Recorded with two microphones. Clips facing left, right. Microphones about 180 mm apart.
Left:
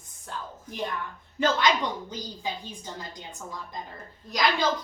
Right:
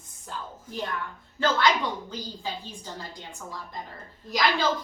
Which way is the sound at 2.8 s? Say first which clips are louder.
Even; 15° left (ahead or behind).